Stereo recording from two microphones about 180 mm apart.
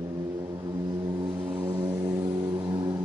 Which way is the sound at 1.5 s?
10° right (ahead or behind).